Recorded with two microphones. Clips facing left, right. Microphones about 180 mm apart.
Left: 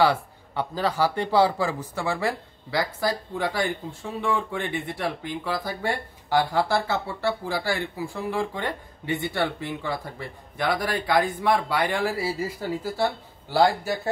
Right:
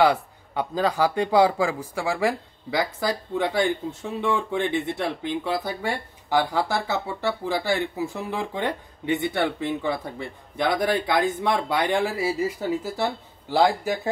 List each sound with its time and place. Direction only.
0.0 s a man's voice: 15° right (ahead or behind)